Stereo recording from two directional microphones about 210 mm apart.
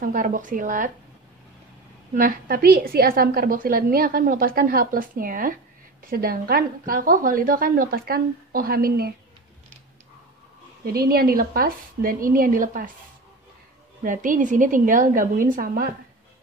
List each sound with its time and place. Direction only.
0.0 s a woman's voice: 40° right (ahead or behind)
2.1 s a woman's voice: 45° right (ahead or behind)
10.9 s a woman's voice: 45° right (ahead or behind)
14.0 s a woman's voice: 40° right (ahead or behind)